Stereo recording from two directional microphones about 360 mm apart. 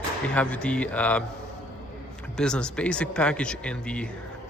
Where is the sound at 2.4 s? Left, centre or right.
Centre.